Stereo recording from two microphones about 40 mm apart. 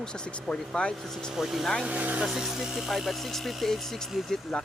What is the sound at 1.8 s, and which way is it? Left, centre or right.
Speech, right.